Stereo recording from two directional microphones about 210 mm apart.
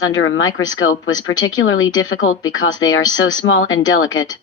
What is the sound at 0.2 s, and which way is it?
Speech, 70° left (ahead or behind).